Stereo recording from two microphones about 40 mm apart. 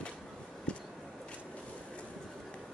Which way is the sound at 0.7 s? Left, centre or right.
Left.